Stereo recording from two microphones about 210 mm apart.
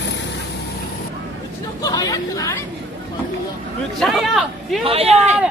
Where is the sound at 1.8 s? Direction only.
20° left (ahead or behind).